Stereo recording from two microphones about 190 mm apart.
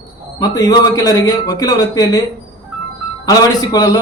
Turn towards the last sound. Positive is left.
turn(degrees=20)  # may be behind; listen again after turning